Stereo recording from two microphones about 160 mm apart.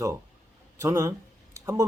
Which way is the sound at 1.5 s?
20° right (ahead or behind).